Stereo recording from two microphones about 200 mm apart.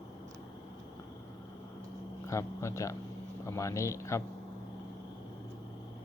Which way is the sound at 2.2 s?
15° left (ahead or behind).